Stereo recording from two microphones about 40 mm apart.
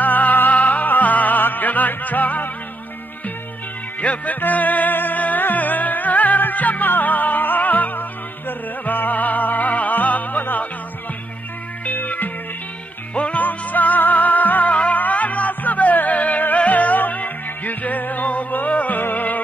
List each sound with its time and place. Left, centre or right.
0.0 s music: left
4.0 s music: left
11.8 s music: left
13.1 s music: left
13.4 s music: left